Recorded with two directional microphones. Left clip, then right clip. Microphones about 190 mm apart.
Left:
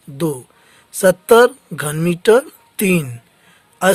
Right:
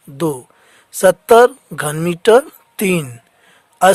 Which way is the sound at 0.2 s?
40° right (ahead or behind).